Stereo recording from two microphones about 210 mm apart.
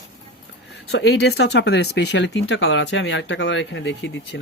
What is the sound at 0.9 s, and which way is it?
Speech, 50° left (ahead or behind).